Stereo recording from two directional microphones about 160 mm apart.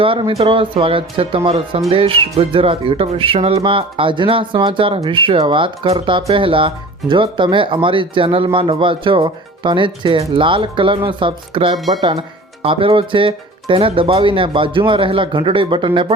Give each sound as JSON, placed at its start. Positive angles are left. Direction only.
{"t": 0.0, "sound": "speech", "side_deg": -35}